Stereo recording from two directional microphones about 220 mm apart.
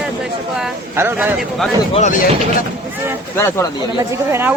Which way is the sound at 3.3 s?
10° left (ahead or behind).